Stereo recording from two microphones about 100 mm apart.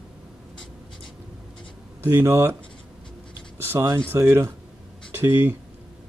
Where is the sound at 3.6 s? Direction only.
25° right (ahead or behind).